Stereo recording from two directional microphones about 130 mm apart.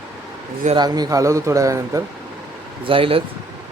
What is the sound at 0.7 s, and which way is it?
Speech, 30° right (ahead or behind).